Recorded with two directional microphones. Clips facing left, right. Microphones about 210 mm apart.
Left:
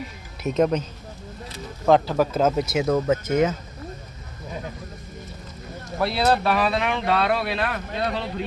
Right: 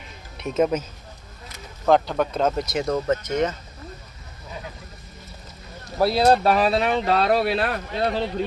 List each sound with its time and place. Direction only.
0.4 s speech: 5° right (ahead or behind)
1.9 s speech: 5° left (ahead or behind)
6.0 s speech: 40° right (ahead or behind)